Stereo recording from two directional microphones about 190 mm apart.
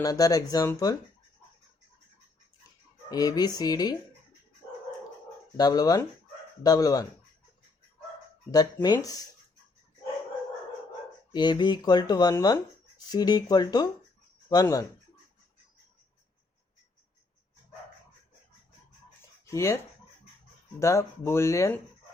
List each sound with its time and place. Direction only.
0.0 s speech: 20° left (ahead or behind)
3.1 s speech: 20° left (ahead or behind)
5.5 s speech: 20° left (ahead or behind)
8.4 s speech: 20° left (ahead or behind)
11.3 s speech: 25° left (ahead or behind)
19.5 s speech: 15° left (ahead or behind)